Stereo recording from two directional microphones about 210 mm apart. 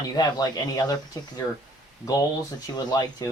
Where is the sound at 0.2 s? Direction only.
20° left (ahead or behind).